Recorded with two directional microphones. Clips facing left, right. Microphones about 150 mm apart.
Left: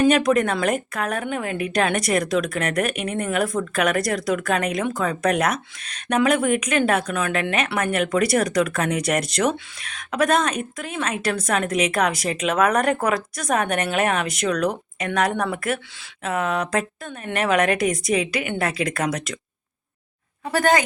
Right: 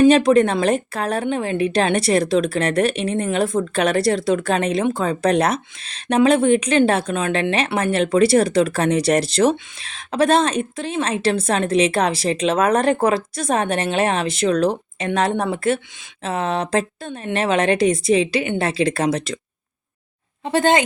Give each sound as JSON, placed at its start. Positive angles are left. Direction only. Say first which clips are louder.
{"t": 0.0, "sound": "a woman's voice", "louder": "right 5 dB", "side_deg": -30}
{"t": 20.4, "sound": "a woman's voice", "louder": "right 3 dB", "side_deg": -25}